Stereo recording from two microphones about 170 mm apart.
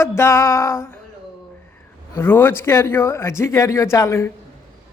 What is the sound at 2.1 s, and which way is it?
Speech, 15° left (ahead or behind).